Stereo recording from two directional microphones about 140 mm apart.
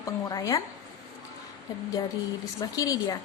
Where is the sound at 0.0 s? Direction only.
25° left (ahead or behind).